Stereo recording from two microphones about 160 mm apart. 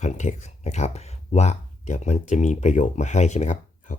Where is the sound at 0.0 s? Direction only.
45° left (ahead or behind).